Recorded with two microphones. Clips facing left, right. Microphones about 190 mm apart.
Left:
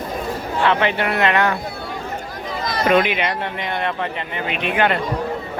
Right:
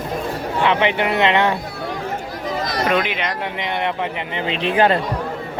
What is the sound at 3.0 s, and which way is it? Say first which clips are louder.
Speech: left 3 dB; 10° left (ahead or behind).